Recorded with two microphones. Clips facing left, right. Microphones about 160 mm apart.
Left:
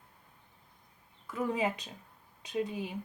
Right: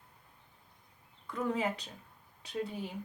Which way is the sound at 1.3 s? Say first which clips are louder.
Left 1 dB; 10° left (ahead or behind).